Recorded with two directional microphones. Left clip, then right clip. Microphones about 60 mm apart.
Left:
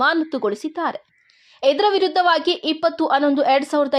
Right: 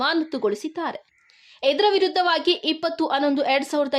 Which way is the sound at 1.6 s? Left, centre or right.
Left.